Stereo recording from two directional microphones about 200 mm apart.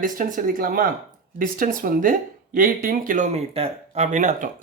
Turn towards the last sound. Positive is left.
turn(degrees=-40)  # may be behind; listen again after turning